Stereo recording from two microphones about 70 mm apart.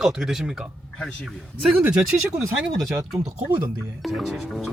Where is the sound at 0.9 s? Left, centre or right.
Centre.